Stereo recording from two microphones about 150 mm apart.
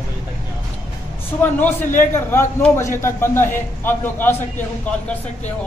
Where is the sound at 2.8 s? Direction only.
15° left (ahead or behind).